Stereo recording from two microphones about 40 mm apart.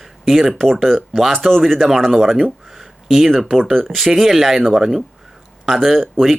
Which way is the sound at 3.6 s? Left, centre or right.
Centre.